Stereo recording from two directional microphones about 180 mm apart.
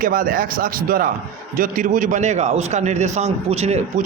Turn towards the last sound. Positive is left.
turn(degrees=-35)  # may be behind; listen again after turning